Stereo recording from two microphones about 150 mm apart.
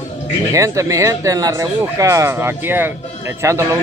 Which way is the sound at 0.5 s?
20° right (ahead or behind).